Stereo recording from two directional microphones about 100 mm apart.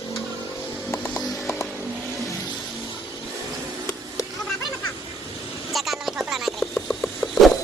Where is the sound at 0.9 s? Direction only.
35° left (ahead or behind).